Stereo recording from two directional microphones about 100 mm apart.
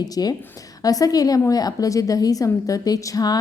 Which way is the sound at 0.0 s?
40° left (ahead or behind).